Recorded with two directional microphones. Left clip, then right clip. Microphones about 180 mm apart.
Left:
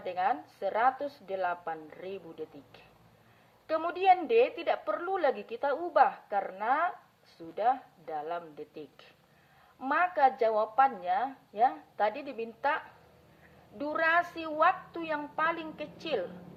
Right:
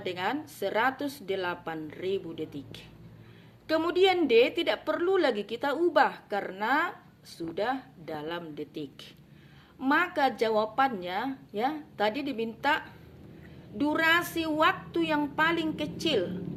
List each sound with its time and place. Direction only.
0.0 s a woman's voice: 45° left (ahead or behind)